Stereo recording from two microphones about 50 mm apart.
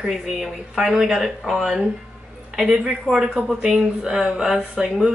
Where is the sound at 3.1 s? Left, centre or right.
Centre.